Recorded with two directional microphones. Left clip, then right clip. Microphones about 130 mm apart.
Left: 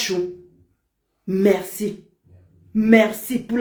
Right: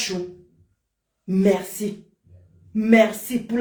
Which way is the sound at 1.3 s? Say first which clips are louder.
Left 2 dB; 25° left (ahead or behind).